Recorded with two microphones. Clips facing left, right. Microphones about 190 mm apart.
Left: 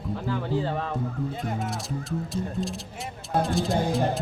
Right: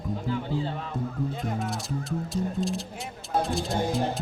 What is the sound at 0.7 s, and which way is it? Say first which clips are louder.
Music: left 5 dB; 50° left (ahead or behind).